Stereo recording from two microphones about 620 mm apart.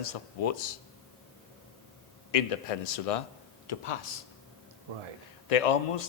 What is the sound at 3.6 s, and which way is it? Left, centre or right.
Speech, left.